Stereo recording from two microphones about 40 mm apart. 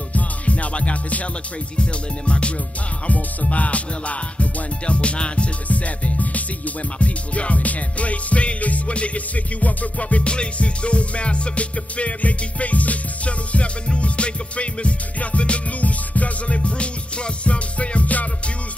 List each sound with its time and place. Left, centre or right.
0.1 s music: left